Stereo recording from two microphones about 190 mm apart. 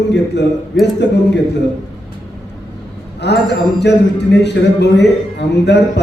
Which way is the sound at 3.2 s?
60° left (ahead or behind).